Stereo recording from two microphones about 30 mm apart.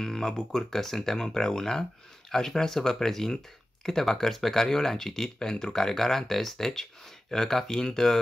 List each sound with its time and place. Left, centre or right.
0.0 s speech: centre
0.6 s speech: centre